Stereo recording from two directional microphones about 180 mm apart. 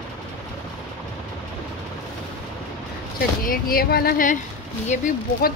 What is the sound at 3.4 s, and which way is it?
Speech, 55° left (ahead or behind).